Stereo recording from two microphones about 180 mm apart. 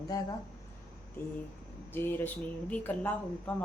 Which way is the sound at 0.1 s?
20° left (ahead or behind).